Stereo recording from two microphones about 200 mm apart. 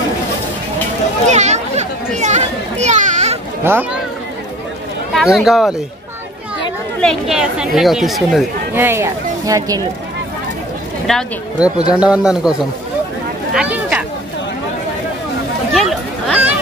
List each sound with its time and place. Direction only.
1.3 s children playing: 35° right (ahead or behind)
3.6 s speech: 10° right (ahead or behind)
5.1 s a man's voice: centre (ahead or behind)
7.0 s speech: centre (ahead or behind)
8.7 s speech: 10° right (ahead or behind)
11.1 s speech: centre (ahead or behind)
13.5 s a sound: 5° right (ahead or behind)
15.7 s a sound: centre (ahead or behind)